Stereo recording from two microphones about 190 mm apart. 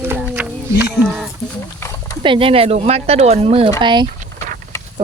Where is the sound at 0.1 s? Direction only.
10° right (ahead or behind).